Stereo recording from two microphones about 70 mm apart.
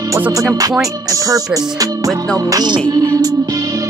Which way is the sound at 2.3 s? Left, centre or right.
Right.